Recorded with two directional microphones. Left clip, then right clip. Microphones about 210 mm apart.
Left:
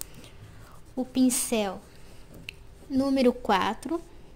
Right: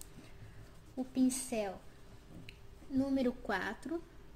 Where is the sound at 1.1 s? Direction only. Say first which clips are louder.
Left 9 dB; 45° left (ahead or behind).